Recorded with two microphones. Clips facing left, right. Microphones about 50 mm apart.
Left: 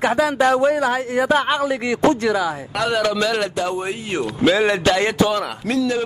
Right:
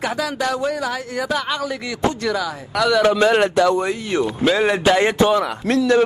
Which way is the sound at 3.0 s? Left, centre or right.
Right.